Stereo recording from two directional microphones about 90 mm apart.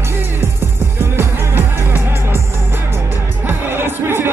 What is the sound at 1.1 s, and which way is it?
Music, 25° right (ahead or behind).